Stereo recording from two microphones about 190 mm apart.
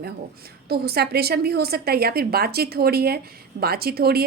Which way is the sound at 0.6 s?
55° right (ahead or behind).